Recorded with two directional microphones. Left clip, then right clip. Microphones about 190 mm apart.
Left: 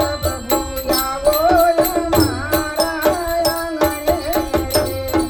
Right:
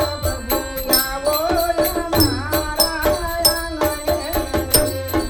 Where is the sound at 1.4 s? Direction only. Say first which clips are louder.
Left 5 dB; 30° left (ahead or behind).